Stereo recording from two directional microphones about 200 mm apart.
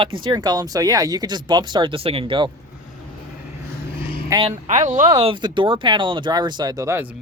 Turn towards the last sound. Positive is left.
turn(degrees=-15)  # may be behind; listen again after turning